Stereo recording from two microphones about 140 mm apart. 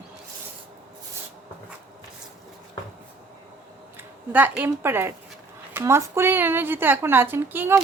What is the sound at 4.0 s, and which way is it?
A woman's voice, 15° right (ahead or behind).